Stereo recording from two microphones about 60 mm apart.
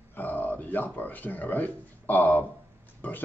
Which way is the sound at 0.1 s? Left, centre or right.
Left.